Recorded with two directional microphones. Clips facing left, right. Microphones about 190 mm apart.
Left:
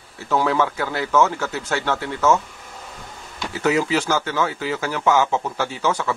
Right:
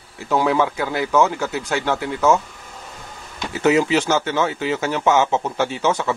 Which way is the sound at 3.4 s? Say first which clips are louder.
Right 3 dB; 20° right (ahead or behind).